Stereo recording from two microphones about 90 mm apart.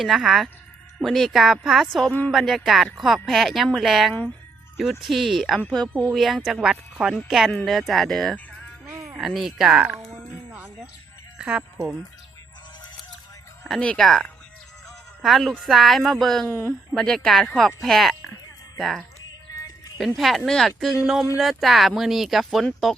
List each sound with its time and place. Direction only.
0.0 s speech: centre (ahead or behind)
5.9 s speech: 15° right (ahead or behind)
6.1 s speech: centre (ahead or behind)
8.9 s music: 30° right (ahead or behind)
9.1 s speech: 5° right (ahead or behind)
10.1 s a sound: 20° right (ahead or behind)
11.3 s speech: 10° right (ahead or behind)
13.7 s speech: 5° left (ahead or behind)
16.5 s speech: 25° left (ahead or behind)
16.9 s speech: 5° left (ahead or behind)